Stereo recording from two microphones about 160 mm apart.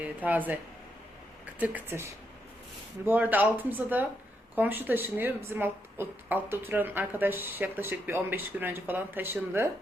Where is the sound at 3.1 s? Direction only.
10° right (ahead or behind).